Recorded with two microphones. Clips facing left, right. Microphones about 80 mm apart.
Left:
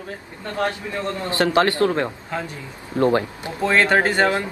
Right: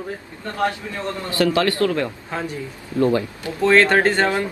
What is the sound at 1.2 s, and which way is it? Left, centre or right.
Speech, left.